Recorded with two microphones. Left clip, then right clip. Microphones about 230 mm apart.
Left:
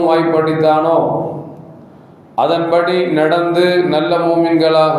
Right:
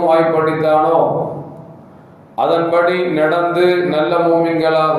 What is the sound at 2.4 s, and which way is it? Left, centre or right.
Mantra, left.